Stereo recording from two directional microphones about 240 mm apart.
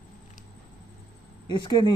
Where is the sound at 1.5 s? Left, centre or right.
Centre.